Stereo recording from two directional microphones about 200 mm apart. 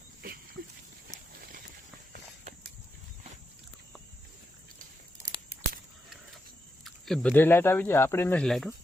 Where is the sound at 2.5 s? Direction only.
35° right (ahead or behind).